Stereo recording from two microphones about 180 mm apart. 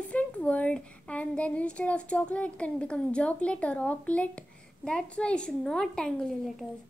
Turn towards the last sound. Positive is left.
turn(degrees=0)  # may be behind; listen again after turning